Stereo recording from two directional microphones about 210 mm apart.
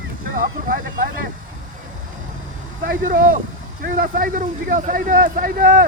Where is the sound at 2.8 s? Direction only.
40° right (ahead or behind).